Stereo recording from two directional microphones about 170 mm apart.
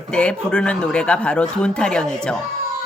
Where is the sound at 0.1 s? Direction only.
5° left (ahead or behind).